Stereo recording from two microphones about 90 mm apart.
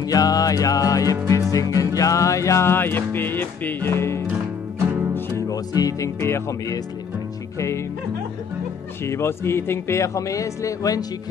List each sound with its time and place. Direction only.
0.0 s music: 45° left (ahead or behind)
1.1 s music: 35° right (ahead or behind)
1.5 s music: 40° left (ahead or behind)
5.5 s speech: 45° left (ahead or behind)
9.0 s speech: 30° left (ahead or behind)